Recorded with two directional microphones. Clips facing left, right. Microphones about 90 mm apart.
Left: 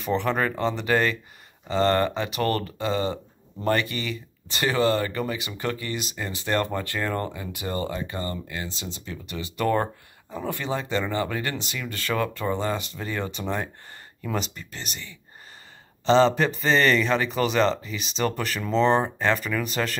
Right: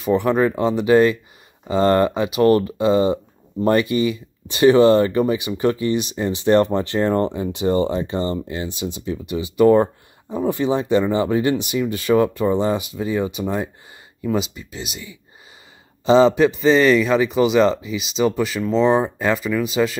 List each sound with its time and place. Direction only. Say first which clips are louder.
0.0 s a man's voice: right 7 dB; 10° right (ahead or behind)